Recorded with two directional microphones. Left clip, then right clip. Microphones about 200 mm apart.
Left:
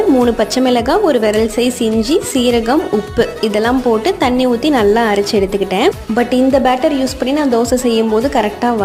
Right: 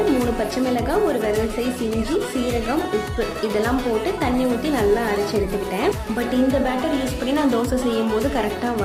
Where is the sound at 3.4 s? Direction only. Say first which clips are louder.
Left 5 dB; 40° left (ahead or behind).